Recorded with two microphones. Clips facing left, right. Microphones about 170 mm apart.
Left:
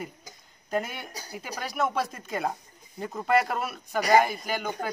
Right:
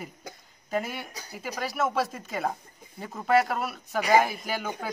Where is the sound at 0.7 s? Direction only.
Centre (ahead or behind).